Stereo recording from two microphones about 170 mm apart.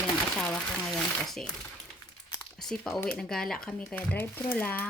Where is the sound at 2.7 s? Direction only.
5° left (ahead or behind).